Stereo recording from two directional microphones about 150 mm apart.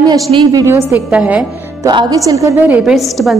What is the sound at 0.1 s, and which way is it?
A woman's voice, 30° right (ahead or behind).